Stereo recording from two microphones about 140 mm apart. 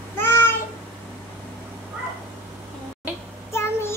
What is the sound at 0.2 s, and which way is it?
Meow, 15° left (ahead or behind).